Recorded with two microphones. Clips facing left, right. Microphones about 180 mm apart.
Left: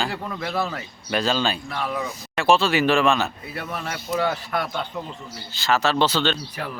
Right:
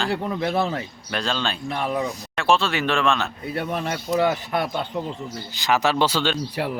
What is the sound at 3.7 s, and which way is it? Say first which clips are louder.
Speech: right 2 dB; 25° right (ahead or behind).